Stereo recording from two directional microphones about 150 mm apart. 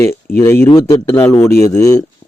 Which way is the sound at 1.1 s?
20° left (ahead or behind).